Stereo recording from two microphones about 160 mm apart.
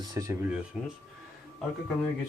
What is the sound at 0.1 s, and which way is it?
Speech, 20° right (ahead or behind).